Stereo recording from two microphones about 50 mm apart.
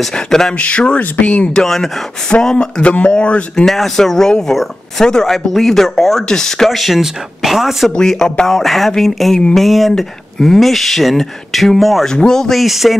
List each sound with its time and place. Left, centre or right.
0.1 s speech: centre
0.6 s speech: left
1.5 s speech: centre
3.5 s speech: centre
7.9 s speech: centre